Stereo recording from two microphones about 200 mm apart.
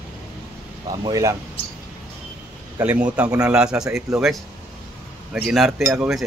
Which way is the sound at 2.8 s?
5° right (ahead or behind).